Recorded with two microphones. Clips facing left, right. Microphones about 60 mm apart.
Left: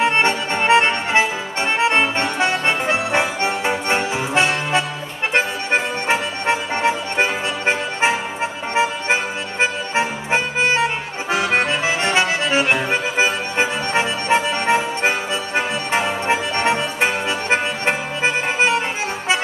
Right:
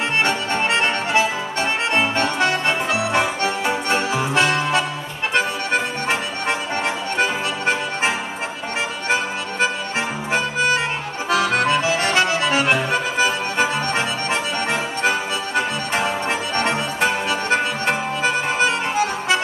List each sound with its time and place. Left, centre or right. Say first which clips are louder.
0.0 s music: left 3 dB; left
2.1 s accordion: even; left
5.3 s music: left 1 dB; left
13.2 s accordion: even; left
16.3 s music: left 3 dB; left